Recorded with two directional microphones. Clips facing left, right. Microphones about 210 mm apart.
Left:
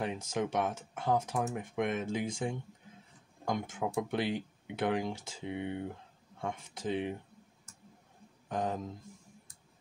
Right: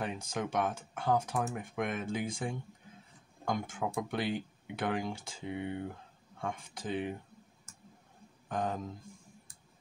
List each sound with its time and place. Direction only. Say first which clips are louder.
0.0 s speech: left 2 dB; 20° left (ahead or behind)
8.5 s speech: left 1 dB; 25° left (ahead or behind)